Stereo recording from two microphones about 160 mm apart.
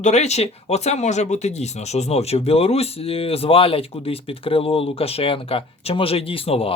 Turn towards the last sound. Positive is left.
turn(degrees=35)  # may be behind; listen again after turning